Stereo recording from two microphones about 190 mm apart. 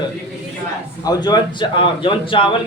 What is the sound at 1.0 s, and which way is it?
A man's voice, 20° left (ahead or behind).